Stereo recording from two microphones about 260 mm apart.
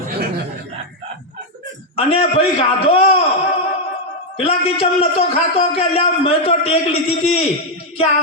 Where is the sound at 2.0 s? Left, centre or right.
Left.